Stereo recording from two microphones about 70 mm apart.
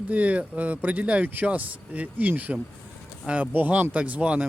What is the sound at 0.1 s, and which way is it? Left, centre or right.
Speech, centre.